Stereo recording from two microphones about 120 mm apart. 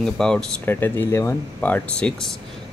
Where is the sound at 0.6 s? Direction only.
20° left (ahead or behind).